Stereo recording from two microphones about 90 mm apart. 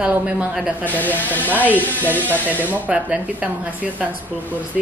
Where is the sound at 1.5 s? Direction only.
20° right (ahead or behind).